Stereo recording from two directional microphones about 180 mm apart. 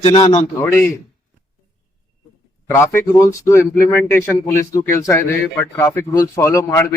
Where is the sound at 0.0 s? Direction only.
30° left (ahead or behind).